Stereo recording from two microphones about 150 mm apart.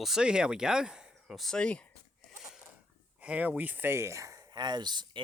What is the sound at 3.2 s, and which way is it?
Speech, 10° right (ahead or behind).